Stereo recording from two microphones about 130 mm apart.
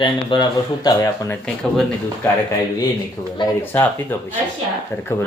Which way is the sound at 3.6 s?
20° left (ahead or behind).